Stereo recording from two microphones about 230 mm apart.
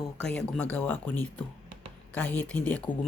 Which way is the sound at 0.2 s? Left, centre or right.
Centre.